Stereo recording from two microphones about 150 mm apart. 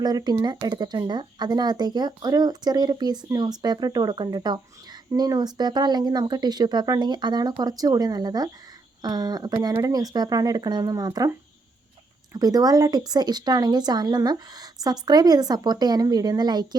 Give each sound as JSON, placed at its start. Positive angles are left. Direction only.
{"t": 0.0, "sound": "speech", "side_deg": -25}
{"t": 12.3, "sound": "speech", "side_deg": -25}